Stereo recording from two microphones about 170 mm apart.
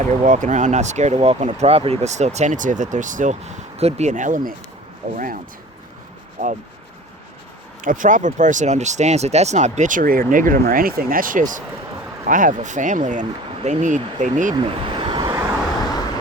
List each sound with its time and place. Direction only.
0.0 s speech: 45° right (ahead or behind)
7.8 s speech: 50° right (ahead or behind)
14.5 s vehicle: 30° right (ahead or behind)
15.8 s vehicle: 25° left (ahead or behind)